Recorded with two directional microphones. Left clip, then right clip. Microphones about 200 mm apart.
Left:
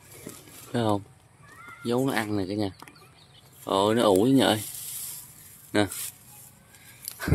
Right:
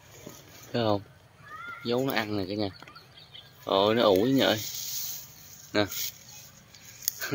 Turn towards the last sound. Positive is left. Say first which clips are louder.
# right 8 dB
turn(degrees=5)  # may be behind; listen again after turning